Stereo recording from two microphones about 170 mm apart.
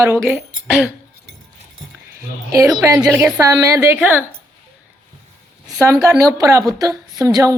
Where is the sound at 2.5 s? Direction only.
20° right (ahead or behind).